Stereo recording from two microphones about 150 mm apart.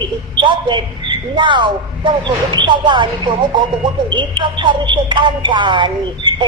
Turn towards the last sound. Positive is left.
turn(degrees=-30)  # may be behind; listen again after turning